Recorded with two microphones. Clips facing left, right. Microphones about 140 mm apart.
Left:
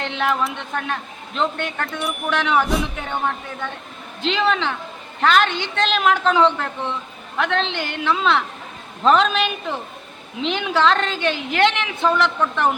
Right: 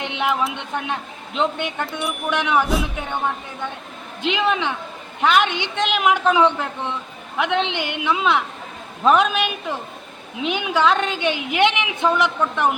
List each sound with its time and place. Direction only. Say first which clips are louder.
0.0 s a sound: left 1 dB; 15° right (ahead or behind)
0.3 s a woman's voice: right 1 dB; 5° right (ahead or behind)
1.9 s speech: even; centre (ahead or behind)
2.3 s a woman's voice: left 1 dB; 15° right (ahead or behind)
2.6 s a woman's voice: even; centre (ahead or behind)